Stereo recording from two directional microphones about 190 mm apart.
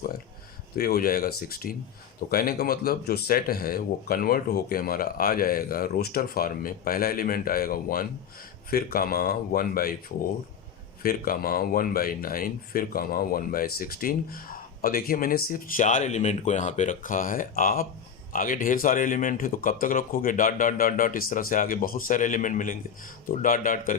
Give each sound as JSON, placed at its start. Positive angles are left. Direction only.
{"t": 0.8, "sound": "speech", "side_deg": 50}
{"t": 11.0, "sound": "speech", "side_deg": 50}